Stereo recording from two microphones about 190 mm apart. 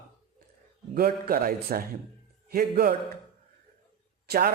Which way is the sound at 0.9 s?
50° right (ahead or behind).